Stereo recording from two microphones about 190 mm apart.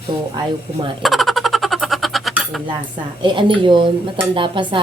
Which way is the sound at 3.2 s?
25° right (ahead or behind).